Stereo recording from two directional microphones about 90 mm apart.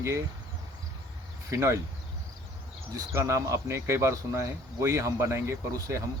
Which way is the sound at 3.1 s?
35° right (ahead or behind).